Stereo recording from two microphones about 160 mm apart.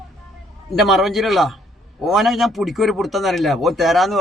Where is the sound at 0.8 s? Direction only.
Centre (ahead or behind).